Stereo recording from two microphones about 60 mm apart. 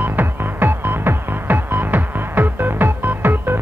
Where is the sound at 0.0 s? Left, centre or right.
Right.